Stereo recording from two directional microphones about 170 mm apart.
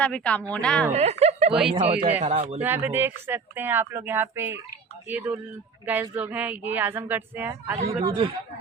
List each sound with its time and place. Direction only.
0.0 s a woman's voice: 5° left (ahead or behind)
0.9 s speech: 40° right (ahead or behind)
2.0 s speech: 40° right (ahead or behind)
2.6 s a woman's voice: 10° right (ahead or behind)
7.8 s speech: 35° right (ahead or behind)